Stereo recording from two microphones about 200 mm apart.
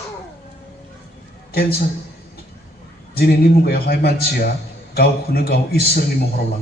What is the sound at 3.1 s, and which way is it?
A man's voice, 50° left (ahead or behind).